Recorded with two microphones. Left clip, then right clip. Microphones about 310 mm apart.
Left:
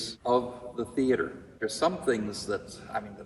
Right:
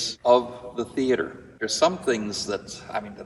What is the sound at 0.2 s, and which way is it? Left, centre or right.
A man's voice, centre.